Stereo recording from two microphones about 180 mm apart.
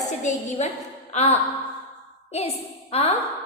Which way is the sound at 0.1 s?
40° left (ahead or behind).